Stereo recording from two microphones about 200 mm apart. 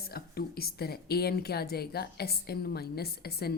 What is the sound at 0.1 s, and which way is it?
A woman's voice, 50° left (ahead or behind).